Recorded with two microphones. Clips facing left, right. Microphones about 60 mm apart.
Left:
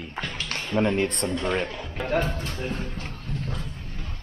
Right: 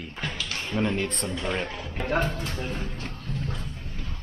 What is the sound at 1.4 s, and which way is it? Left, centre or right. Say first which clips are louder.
Speech: left 2 dB; centre.